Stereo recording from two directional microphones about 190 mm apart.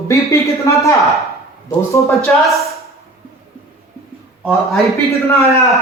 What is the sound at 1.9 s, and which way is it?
Speech, 15° left (ahead or behind).